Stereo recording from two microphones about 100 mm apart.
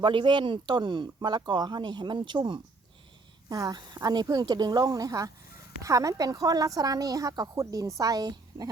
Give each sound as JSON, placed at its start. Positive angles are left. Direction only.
{"t": 0.0, "sound": "speech", "side_deg": -55}
{"t": 3.5, "sound": "a woman's voice", "side_deg": -40}